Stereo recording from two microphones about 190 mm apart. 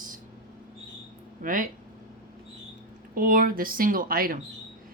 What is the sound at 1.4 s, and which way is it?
Speech, 45° right (ahead or behind).